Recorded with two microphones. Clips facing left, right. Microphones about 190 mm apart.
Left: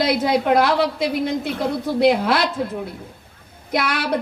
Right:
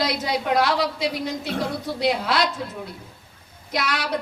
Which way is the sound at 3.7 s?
55° left (ahead or behind).